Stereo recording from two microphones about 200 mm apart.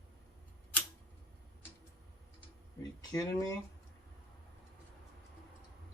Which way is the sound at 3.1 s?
20° left (ahead or behind).